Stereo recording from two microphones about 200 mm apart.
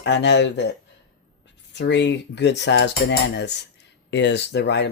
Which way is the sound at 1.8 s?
60° left (ahead or behind).